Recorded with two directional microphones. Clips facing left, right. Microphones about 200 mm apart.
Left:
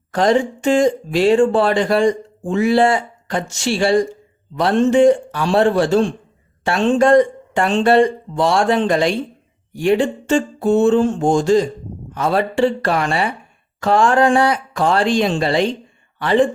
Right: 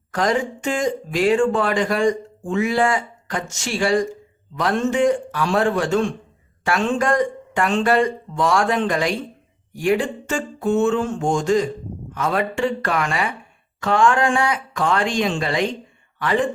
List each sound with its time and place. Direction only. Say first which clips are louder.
0.1 s speech: left 5 dB; 30° left (ahead or behind)